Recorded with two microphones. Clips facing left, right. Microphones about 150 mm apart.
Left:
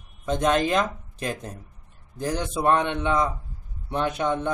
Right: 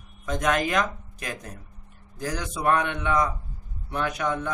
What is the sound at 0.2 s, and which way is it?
A man's voice, 25° left (ahead or behind).